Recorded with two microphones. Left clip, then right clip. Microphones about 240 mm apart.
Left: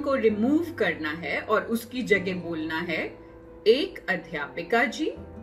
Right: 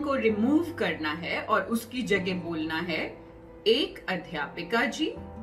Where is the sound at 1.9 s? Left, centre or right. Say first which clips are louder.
Left 3 dB; centre.